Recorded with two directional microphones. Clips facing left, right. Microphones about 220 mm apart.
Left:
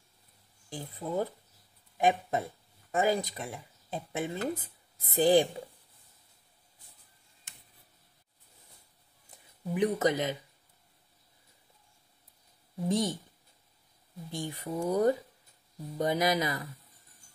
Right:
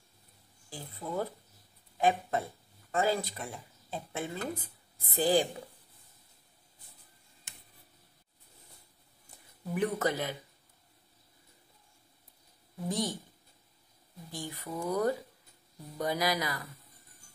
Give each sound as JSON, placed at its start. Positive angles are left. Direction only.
{"t": 0.7, "sound": "speech", "side_deg": 20}
{"t": 9.8, "sound": "speech", "side_deg": 20}
{"t": 12.8, "sound": "speech", "side_deg": 25}
{"t": 14.3, "sound": "speech", "side_deg": 25}